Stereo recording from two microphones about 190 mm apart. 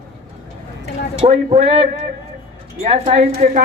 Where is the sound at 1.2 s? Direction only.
30° right (ahead or behind).